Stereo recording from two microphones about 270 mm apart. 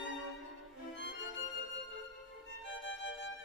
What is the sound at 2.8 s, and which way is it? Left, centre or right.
Violin, left.